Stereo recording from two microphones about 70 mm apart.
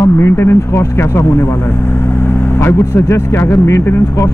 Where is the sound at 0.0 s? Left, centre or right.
Left.